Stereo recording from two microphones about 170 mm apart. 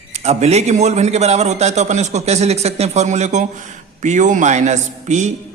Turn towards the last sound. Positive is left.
turn(degrees=-45)  # may be behind; listen again after turning